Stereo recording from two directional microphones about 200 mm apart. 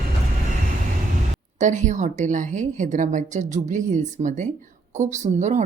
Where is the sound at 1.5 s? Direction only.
40° right (ahead or behind).